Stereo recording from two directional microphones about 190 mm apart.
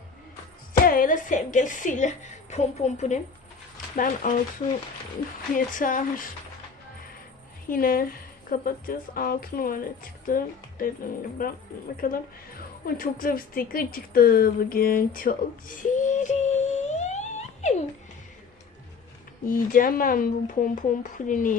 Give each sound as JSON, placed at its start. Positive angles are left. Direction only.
{"t": 0.7, "sound": "a woman's voice", "side_deg": 45}
{"t": 5.5, "sound": "speech", "side_deg": 45}
{"t": 7.7, "sound": "a woman's voice", "side_deg": 50}
{"t": 19.5, "sound": "speech", "side_deg": 45}